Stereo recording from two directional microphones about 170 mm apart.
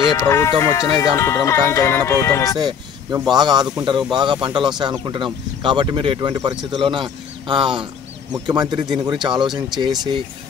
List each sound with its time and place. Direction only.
0.1 s speech: 15° left (ahead or behind)
3.3 s speech: 25° right (ahead or behind)